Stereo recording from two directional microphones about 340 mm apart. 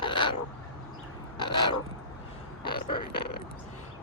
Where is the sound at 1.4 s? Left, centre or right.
Centre.